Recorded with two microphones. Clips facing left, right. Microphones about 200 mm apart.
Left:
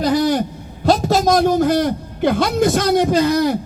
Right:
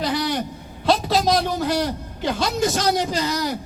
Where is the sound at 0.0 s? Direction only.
45° left (ahead or behind).